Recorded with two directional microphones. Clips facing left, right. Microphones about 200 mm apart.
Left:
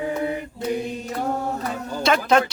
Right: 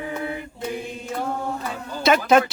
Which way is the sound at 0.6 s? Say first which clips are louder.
Left 6 dB; 40° left (ahead or behind).